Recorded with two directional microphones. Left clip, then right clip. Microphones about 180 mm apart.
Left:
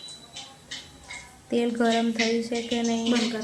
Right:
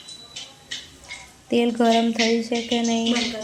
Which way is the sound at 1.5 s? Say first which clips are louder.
Right 5 dB; 20° right (ahead or behind).